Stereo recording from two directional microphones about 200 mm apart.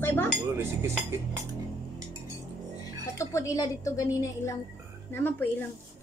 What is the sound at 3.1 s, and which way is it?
A woman's voice, 15° left (ahead or behind).